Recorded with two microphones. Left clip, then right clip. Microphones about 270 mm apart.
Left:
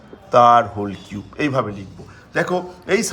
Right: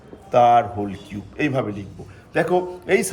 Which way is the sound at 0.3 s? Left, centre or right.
Centre.